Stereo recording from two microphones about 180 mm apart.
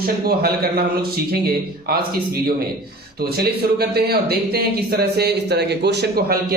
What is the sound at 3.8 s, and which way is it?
Speech, 60° right (ahead or behind).